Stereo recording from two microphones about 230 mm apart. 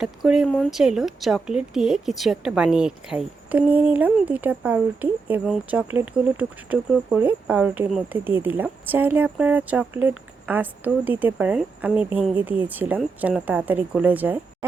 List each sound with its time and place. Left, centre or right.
0.0 s a woman's voice: centre